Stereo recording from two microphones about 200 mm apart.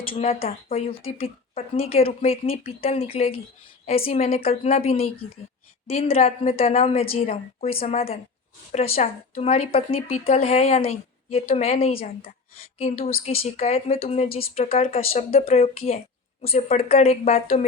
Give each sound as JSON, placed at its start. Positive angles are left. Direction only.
{"t": 0.1, "sound": "a woman's voice", "side_deg": 30}
{"t": 11.9, "sound": "speech", "side_deg": 45}
{"t": 12.8, "sound": "a woman's voice", "side_deg": 30}